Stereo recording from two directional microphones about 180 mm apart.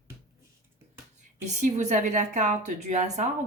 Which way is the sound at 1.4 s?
40° right (ahead or behind).